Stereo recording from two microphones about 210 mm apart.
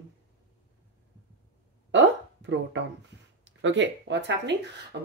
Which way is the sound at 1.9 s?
60° right (ahead or behind).